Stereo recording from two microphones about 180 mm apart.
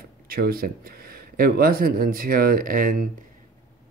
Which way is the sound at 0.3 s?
55° right (ahead or behind).